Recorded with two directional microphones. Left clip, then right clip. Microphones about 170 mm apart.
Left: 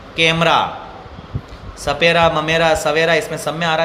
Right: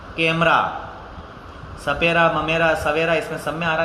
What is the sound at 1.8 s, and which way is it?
Speech, 50° left (ahead or behind).